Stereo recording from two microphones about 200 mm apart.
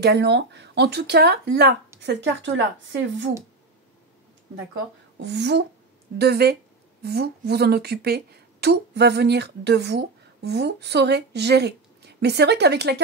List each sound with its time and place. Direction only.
0.0 s speech: 55° right (ahead or behind)
5.1 s a woman's voice: 60° right (ahead or behind)